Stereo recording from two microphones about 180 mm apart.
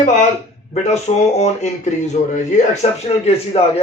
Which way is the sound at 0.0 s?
40° left (ahead or behind).